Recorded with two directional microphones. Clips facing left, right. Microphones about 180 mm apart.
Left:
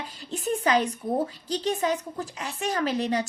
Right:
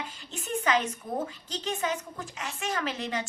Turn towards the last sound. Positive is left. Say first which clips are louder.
# left 7 dB
turn(degrees=35)  # may be behind; listen again after turning